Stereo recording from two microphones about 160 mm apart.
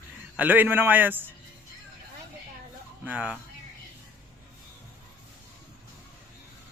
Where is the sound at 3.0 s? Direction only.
10° right (ahead or behind).